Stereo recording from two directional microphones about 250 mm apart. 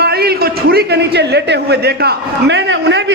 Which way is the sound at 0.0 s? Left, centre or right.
Right.